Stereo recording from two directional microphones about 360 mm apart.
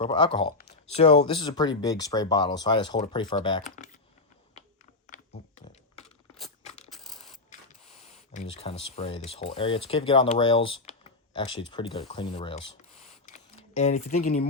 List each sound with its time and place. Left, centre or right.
0.0 s speech: centre
5.0 s typing: left
6.6 s mechanisms: centre
7.0 s coin: centre
8.0 s a sound: centre
8.7 s speech: centre
11.4 s speech: left
11.7 s speech: centre
13.2 s camera: centre